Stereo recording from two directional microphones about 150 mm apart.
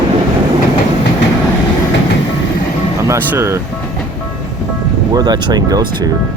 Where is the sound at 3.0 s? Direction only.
20° right (ahead or behind).